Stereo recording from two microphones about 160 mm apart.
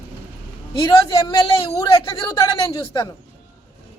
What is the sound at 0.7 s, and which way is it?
A woman's voice, 25° left (ahead or behind).